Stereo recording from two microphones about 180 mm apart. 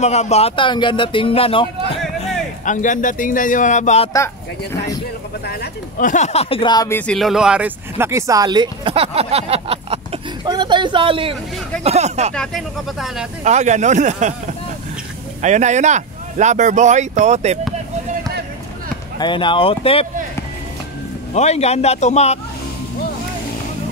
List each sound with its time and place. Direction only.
0.0 s speech: 35° left (ahead or behind)
2.2 s speech: 45° left (ahead or behind)
5.4 s speech: 65° left (ahead or behind); by 7.0 s 20° left (ahead or behind)
7.0 s speech: 5° left (ahead or behind); by 12.4 s 40° right (ahead or behind)
12.4 s speech: centre (ahead or behind)
13.4 s speech: 40° right (ahead or behind)
15.4 s speech: 40° right (ahead or behind)
19.1 s speech: 25° left (ahead or behind)
21.3 s speech: 35° left (ahead or behind)